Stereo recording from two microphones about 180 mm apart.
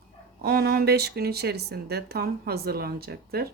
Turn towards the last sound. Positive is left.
turn(degrees=-60)  # may be behind; listen again after turning